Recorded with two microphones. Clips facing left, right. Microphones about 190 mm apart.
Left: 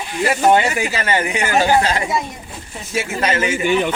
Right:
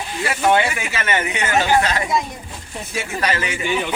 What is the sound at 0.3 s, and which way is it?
Speech, 40° left (ahead or behind).